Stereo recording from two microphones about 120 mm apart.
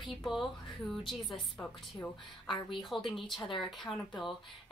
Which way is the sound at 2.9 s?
Centre (ahead or behind).